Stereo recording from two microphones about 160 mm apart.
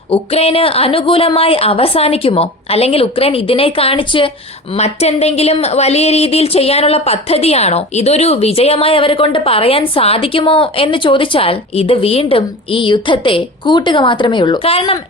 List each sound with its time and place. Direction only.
0.1 s a woman's voice: 40° left (ahead or behind)